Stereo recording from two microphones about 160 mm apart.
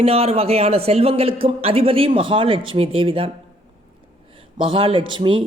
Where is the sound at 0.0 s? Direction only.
40° right (ahead or behind).